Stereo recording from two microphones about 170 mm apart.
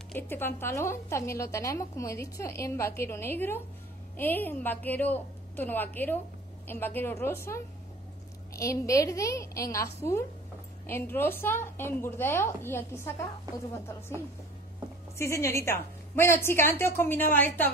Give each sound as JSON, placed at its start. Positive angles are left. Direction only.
{"t": 0.1, "sound": "a woman's voice", "side_deg": 15}
{"t": 15.1, "sound": "a woman's voice", "side_deg": 15}